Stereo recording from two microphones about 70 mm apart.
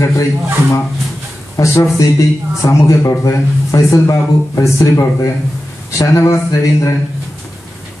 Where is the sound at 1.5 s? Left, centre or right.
Left.